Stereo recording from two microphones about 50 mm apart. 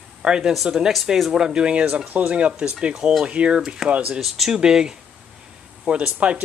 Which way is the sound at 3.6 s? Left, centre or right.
Centre.